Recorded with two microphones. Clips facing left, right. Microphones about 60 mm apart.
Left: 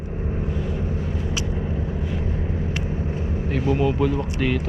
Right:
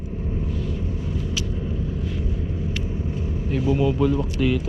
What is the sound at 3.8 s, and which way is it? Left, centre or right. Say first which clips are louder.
Speech: right 2 dB; centre.